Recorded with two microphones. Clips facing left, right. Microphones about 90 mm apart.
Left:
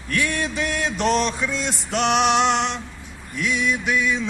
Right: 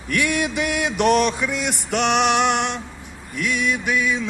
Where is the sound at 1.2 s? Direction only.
10° right (ahead or behind).